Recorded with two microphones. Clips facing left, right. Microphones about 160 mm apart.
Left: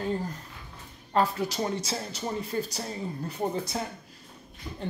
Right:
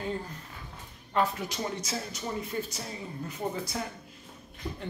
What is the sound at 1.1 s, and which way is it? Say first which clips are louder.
Speech: left 3 dB; 35° left (ahead or behind).